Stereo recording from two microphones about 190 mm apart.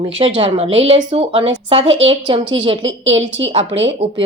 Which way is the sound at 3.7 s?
70° right (ahead or behind).